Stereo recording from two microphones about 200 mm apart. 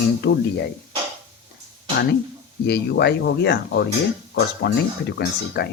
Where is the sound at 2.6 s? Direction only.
55° left (ahead or behind).